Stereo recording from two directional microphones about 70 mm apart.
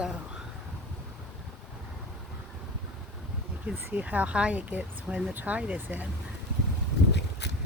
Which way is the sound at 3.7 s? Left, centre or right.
Right.